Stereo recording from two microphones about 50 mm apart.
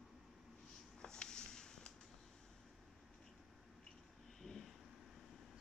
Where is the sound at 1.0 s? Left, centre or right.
Centre.